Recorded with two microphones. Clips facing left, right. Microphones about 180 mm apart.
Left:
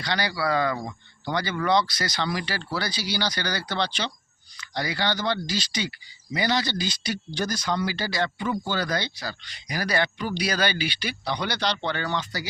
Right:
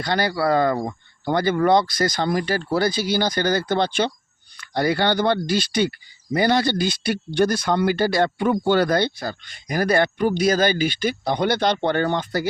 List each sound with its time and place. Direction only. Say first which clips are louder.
0.0 s speech: right 6 dB; 50° right (ahead or behind)